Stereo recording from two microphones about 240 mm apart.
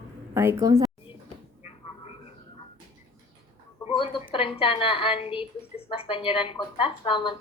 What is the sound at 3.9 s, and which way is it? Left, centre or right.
A woman's voice, left.